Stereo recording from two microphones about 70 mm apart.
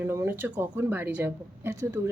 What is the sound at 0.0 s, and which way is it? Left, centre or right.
Speech, right.